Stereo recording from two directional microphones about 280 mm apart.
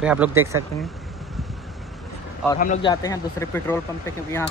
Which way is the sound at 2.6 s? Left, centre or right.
Left.